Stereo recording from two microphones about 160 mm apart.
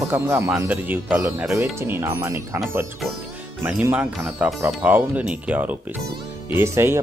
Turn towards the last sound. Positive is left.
turn(degrees=-15)  # may be behind; listen again after turning